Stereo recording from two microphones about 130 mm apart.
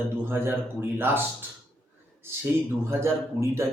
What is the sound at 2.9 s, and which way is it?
Speech, 20° right (ahead or behind).